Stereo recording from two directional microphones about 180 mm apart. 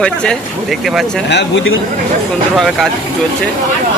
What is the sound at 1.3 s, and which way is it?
Speech, 80° left.